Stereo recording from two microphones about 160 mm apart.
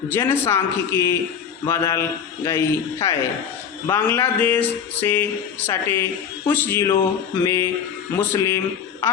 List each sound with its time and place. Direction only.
0.1 s speech: 15° left (ahead or behind)